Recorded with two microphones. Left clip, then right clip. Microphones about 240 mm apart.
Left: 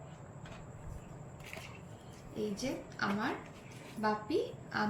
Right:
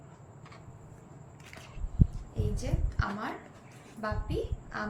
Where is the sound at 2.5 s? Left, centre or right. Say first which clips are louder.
Even; right.